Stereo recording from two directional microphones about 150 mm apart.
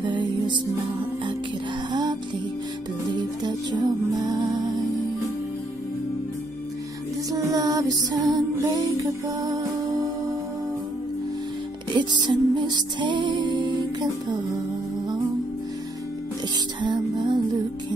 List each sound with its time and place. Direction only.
0.0 s music: 30° right (ahead or behind)
1.9 s music: 30° right (ahead or behind)
3.4 s music: 25° right (ahead or behind)
7.2 s music: 25° right (ahead or behind)
11.9 s music: 30° right (ahead or behind)
16.8 s music: 30° right (ahead or behind)